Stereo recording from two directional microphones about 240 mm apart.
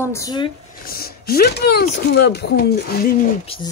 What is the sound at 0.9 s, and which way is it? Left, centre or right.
Speech, left.